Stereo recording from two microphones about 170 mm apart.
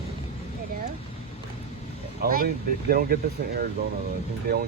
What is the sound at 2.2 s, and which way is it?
Speech, 60° right (ahead or behind).